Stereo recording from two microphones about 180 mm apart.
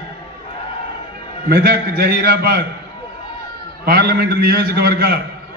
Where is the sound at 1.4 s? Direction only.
60° right (ahead or behind).